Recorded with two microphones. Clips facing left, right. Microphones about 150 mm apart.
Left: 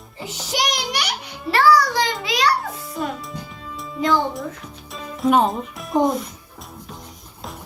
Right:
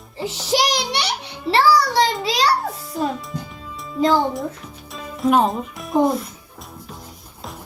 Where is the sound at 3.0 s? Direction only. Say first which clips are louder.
Right 4 dB; centre (ahead or behind).